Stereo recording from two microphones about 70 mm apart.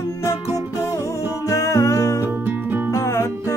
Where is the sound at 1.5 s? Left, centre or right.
Left.